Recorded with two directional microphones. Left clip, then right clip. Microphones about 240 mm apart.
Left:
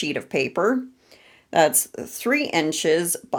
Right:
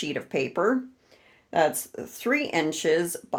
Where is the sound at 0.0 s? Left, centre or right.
Left.